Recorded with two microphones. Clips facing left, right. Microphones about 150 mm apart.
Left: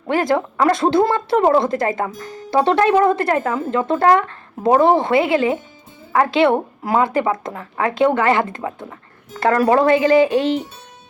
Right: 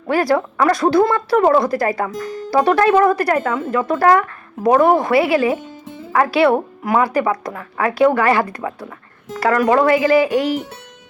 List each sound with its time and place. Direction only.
0.1 s speech: 20° left (ahead or behind)